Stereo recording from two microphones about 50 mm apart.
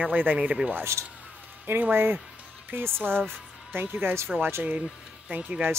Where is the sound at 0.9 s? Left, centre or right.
Right.